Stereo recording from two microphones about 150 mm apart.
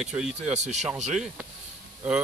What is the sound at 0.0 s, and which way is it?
Speech, 5° right (ahead or behind).